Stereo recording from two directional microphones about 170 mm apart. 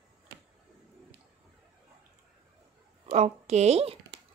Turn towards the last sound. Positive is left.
turn(degrees=-35)  # may be behind; listen again after turning